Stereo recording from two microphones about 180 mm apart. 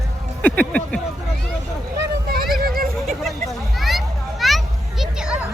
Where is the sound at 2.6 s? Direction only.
55° right (ahead or behind).